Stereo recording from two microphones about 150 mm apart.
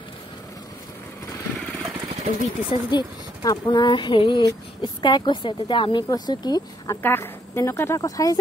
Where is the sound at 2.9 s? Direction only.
25° left (ahead or behind).